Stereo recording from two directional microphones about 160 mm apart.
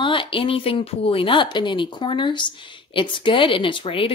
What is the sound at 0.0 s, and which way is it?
A woman's voice, 30° left (ahead or behind).